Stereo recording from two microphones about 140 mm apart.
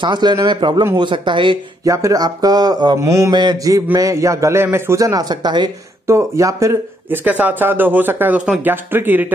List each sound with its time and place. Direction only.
0.0 s speech: 30° right (ahead or behind)
1.9 s a man's voice: 25° right (ahead or behind)
6.0 s speech: 20° right (ahead or behind)